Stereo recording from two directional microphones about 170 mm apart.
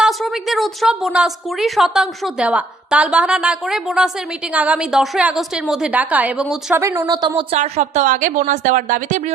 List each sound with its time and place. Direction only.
0.0 s a woman's voice: centre (ahead or behind)
6.7 s a woman's voice: 20° right (ahead or behind)
7.6 s a woman's voice: 45° right (ahead or behind)